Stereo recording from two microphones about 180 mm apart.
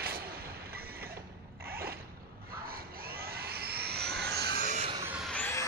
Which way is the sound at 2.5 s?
55° right (ahead or behind).